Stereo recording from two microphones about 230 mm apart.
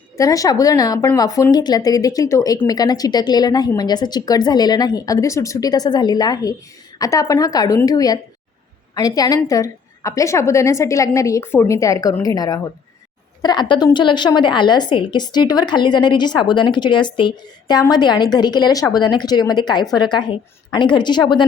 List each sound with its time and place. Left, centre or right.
0.2 s a woman's voice: centre